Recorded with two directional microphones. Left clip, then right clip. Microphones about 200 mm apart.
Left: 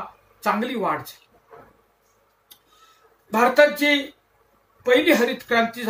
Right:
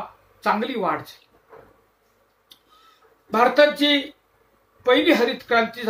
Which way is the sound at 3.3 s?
10° right (ahead or behind).